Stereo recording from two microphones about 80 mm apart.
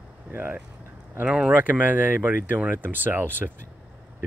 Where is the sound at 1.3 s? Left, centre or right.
Centre.